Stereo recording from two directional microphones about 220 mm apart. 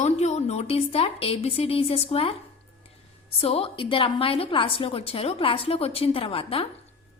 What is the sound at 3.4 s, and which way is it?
A woman's voice, 25° left (ahead or behind).